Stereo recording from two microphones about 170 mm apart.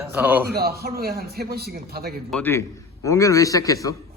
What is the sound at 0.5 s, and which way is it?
A man's voice, 65° right (ahead or behind).